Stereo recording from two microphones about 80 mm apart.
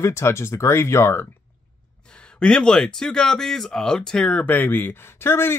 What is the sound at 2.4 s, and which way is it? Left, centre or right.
Speech, centre.